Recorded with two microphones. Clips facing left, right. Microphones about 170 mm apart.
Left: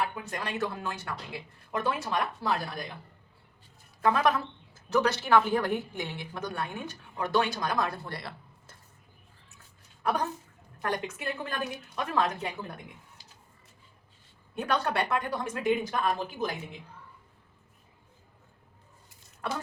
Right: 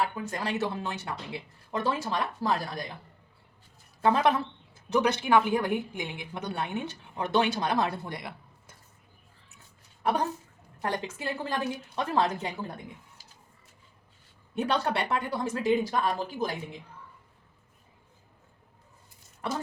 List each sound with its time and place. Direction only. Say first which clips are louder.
0.0 s speech: right 2 dB; 30° right (ahead or behind)
4.0 s speech: right 1 dB; 25° right (ahead or behind)
10.0 s a woman's voice: right 2 dB; 30° right (ahead or behind)
14.5 s speech: right 1 dB; 25° right (ahead or behind)